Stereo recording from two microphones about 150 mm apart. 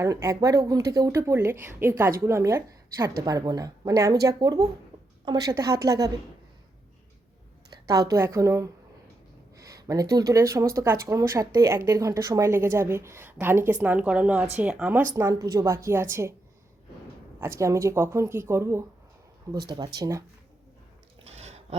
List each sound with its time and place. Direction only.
0.0 s a woman's voice: 20° right (ahead or behind)
7.7 s a woman's voice: 25° right (ahead or behind); by 15.0 s 5° right (ahead or behind)
15.1 s a woman's voice: 20° right (ahead or behind)
17.4 s a woman's voice: 20° right (ahead or behind)
21.2 s a sound: 45° right (ahead or behind)